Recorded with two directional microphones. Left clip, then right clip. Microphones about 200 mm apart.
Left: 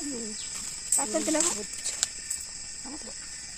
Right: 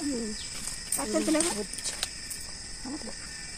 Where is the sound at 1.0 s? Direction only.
45° left (ahead or behind).